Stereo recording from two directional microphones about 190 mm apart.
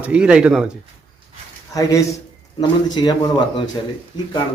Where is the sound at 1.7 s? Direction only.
15° left (ahead or behind).